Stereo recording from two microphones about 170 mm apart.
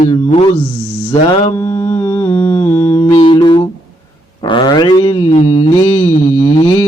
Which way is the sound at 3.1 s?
30° left (ahead or behind).